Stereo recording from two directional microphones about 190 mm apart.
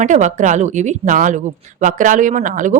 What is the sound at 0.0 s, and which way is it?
A woman's voice, 40° right (ahead or behind).